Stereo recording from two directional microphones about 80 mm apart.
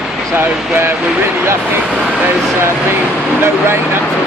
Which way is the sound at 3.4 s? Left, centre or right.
Right.